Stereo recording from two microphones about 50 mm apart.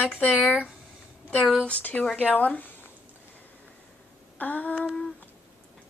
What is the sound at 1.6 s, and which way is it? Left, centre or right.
Speech, left.